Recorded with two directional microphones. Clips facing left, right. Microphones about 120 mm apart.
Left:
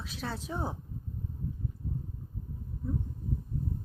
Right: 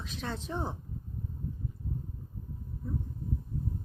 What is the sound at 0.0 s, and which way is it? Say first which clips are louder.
Speech: even; 5° left (ahead or behind).